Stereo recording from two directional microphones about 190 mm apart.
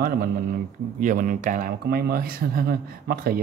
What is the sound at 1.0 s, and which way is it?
Speech, 45° right (ahead or behind).